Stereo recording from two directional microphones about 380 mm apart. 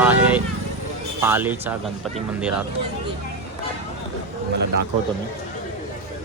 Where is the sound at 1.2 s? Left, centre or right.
Centre.